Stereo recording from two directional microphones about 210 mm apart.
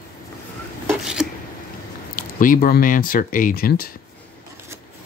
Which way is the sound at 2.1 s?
40° left (ahead or behind).